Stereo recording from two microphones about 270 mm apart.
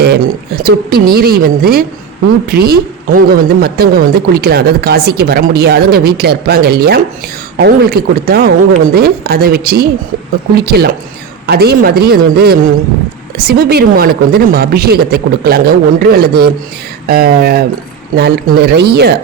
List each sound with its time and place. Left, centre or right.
0.0 s a woman's voice: right